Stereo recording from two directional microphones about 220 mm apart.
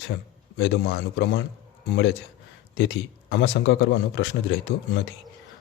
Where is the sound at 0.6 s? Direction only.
50° left (ahead or behind).